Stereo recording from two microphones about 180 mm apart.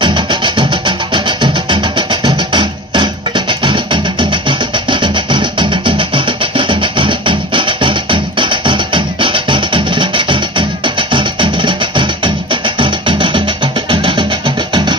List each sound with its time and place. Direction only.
0.0 s music: 25° right (ahead or behind)